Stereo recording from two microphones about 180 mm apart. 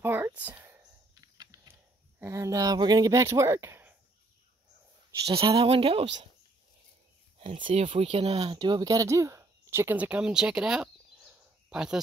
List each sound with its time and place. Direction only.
0.0 s a sound: 10° right (ahead or behind)
2.1 s speech: 15° right (ahead or behind)
5.2 s speech: 30° right (ahead or behind)
7.3 s speech: 30° right (ahead or behind); by 12.0 s 5° right (ahead or behind)